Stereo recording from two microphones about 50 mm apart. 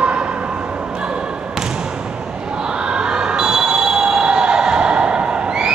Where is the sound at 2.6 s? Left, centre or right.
Centre.